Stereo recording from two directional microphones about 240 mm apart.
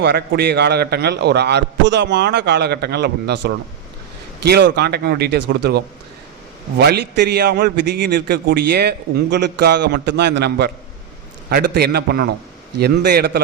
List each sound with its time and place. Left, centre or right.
0.0 s a man's voice: right
4.4 s a man's voice: right
11.7 s a man's voice: right